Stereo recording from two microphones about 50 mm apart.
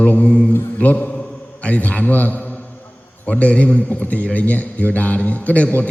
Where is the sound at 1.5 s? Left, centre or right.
Left.